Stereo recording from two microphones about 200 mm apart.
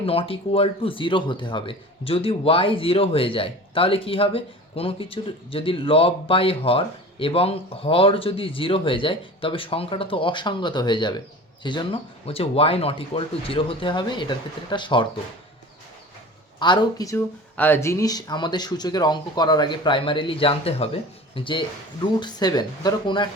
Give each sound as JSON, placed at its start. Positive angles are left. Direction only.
{"t": 0.0, "sound": "speech", "side_deg": 30}
{"t": 16.6, "sound": "speech", "side_deg": 20}